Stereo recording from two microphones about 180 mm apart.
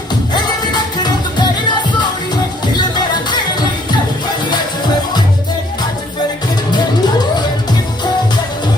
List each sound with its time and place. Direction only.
0.6 s music: 25° left (ahead or behind)
6.7 s music: 25° left (ahead or behind)